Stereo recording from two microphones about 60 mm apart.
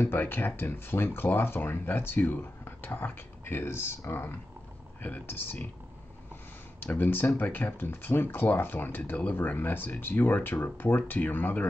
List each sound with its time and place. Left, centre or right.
0.0 s speech: left
5.0 s speech: left
6.9 s speech: left